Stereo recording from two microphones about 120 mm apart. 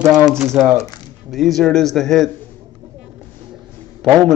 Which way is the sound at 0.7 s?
30° left (ahead or behind).